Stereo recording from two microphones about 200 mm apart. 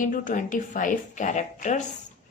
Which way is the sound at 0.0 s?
40° left (ahead or behind).